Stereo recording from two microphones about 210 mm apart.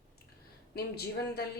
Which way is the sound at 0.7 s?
50° left (ahead or behind).